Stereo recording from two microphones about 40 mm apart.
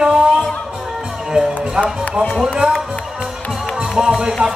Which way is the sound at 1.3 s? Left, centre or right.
Centre.